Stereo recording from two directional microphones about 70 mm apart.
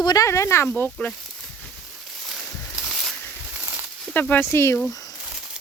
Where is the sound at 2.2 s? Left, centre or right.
Centre.